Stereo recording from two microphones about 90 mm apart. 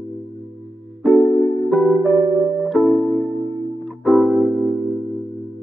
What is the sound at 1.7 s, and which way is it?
Music, centre (ahead or behind).